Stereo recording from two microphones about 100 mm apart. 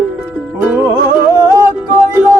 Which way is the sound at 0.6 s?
20° right (ahead or behind).